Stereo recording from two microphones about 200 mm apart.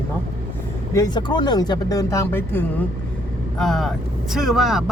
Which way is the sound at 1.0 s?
20° left (ahead or behind).